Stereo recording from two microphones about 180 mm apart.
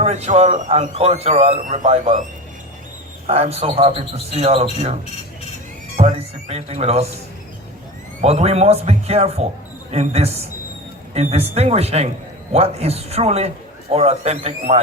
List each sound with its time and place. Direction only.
0.0 s speech: 35° right (ahead or behind)
3.2 s speech: 35° right (ahead or behind)
6.0 s speech: 35° right (ahead or behind)
8.2 s speech: 35° right (ahead or behind)